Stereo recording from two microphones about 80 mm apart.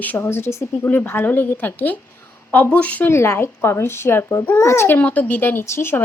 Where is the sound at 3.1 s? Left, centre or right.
Left.